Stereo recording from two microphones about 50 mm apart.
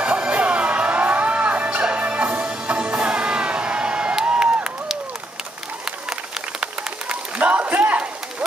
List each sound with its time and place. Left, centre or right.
0.0 s music: right
4.3 s a sound: right
6.6 s run: right